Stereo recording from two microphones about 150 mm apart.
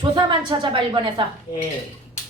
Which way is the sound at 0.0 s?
30° right (ahead or behind).